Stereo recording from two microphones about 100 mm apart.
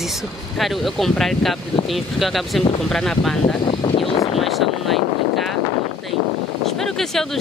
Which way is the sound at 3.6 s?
60° left (ahead or behind).